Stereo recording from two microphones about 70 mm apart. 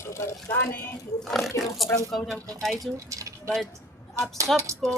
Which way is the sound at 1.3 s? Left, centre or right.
Centre.